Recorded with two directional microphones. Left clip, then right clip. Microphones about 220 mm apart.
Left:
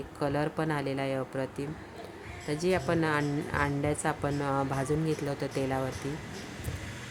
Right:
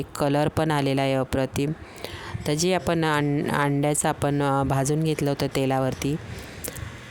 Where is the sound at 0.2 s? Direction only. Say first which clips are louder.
Right 8 dB; 50° right (ahead or behind).